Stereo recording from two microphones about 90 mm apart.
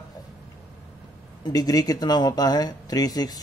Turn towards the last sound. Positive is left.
turn(degrees=45)  # may be behind; listen again after turning